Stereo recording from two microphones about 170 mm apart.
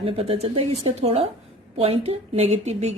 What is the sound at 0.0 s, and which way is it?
A woman's voice, 35° right (ahead or behind).